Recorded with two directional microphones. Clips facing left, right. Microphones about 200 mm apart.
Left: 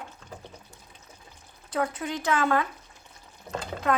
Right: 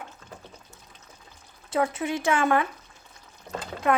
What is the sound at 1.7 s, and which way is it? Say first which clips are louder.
Speech: right 3 dB; 25° right (ahead or behind).